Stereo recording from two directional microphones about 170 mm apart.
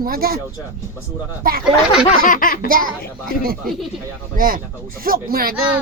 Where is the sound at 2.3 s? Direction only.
55° left (ahead or behind).